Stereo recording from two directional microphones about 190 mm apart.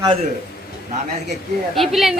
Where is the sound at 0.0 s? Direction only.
25° right (ahead or behind).